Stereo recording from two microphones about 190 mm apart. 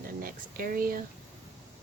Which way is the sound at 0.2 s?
50° right (ahead or behind).